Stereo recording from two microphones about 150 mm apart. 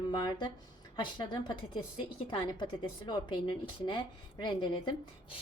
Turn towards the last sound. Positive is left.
turn(degrees=30)  # may be behind; listen again after turning